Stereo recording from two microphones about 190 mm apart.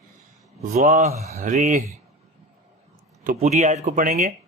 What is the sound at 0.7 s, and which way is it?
Mantra, 35° right (ahead or behind).